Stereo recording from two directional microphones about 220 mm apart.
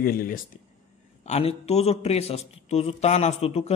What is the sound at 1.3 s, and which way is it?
Speech, 30° left (ahead or behind).